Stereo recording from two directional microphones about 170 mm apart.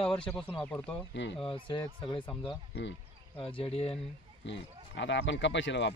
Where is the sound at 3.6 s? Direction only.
35° left (ahead or behind).